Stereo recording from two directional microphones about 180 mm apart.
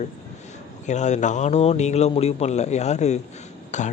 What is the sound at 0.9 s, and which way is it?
Speech, 40° left (ahead or behind).